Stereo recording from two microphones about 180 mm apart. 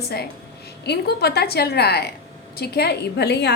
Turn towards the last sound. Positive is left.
turn(degrees=70)  # may be behind; listen again after turning